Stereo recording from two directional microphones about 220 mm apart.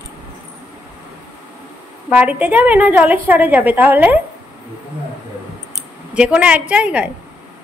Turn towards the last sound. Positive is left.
turn(degrees=-5)  # may be behind; listen again after turning